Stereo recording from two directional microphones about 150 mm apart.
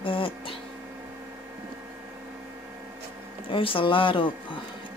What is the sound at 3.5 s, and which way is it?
Speech, 35° left (ahead or behind).